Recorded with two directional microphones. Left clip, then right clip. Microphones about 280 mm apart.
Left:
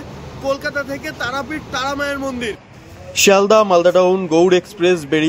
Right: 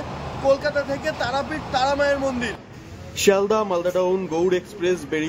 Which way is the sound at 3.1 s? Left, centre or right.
Centre.